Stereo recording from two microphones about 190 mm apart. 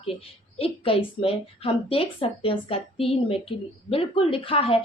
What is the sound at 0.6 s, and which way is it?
A woman's voice, 30° left (ahead or behind).